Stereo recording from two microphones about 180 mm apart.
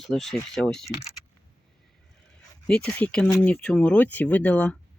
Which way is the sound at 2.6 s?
5° left (ahead or behind).